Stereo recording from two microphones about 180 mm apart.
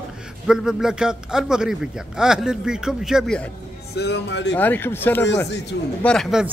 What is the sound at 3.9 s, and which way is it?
Speech, 70° left (ahead or behind).